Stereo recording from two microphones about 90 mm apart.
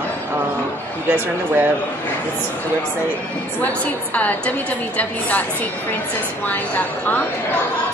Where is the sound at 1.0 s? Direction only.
20° right (ahead or behind).